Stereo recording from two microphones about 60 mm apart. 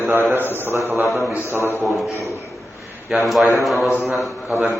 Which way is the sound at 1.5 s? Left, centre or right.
Right.